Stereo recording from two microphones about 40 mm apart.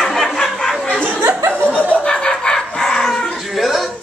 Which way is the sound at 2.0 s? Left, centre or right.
Left.